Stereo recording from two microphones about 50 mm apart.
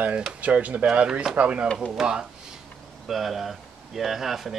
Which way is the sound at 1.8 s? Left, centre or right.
Centre.